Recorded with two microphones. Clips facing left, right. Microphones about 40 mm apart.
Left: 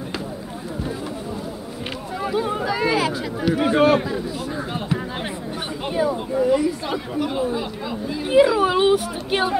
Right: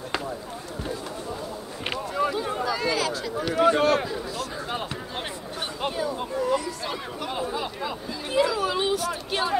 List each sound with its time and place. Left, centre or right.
2.3 s a sound: centre
5.9 s speech: centre
8.3 s speech: left